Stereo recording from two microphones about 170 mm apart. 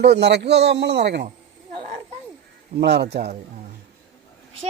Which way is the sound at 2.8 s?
75° right (ahead or behind).